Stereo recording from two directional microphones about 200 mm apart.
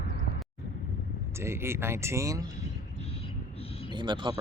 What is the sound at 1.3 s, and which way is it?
Speech, 15° right (ahead or behind).